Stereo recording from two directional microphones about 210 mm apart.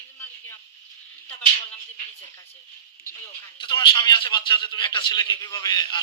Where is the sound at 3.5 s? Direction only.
20° left (ahead or behind).